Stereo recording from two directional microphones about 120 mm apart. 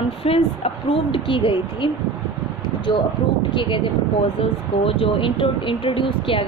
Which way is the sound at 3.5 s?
40° left (ahead or behind).